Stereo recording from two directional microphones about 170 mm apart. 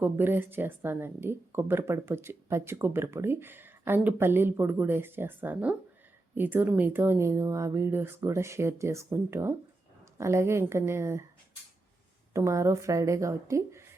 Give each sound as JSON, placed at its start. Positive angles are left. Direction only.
{"t": 0.0, "sound": "a woman's voice", "side_deg": -10}
{"t": 12.3, "sound": "a woman's voice", "side_deg": -15}